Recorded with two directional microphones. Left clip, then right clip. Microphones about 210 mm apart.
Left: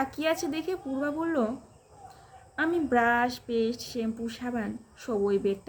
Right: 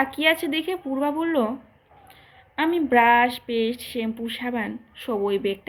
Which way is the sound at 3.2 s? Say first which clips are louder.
Right 4 dB; 15° left (ahead or behind).